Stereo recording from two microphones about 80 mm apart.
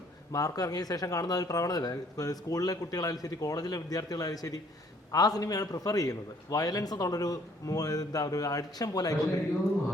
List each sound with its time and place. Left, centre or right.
0.3 s speech: left